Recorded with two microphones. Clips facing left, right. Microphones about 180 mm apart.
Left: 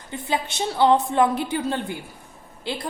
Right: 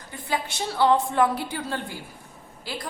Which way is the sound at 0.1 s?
20° left (ahead or behind).